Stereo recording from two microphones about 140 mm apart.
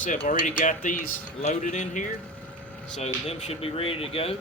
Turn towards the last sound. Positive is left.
turn(degrees=45)  # may be behind; listen again after turning